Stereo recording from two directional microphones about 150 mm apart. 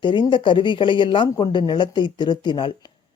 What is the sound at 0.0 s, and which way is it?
A woman's voice, 30° left (ahead or behind).